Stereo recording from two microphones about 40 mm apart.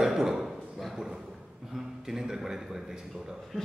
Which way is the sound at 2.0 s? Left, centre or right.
Centre.